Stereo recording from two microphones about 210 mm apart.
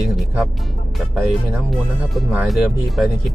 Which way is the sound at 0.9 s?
Centre (ahead or behind).